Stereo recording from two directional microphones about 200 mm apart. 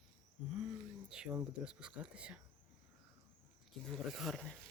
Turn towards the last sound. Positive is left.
turn(degrees=0)  # may be behind; listen again after turning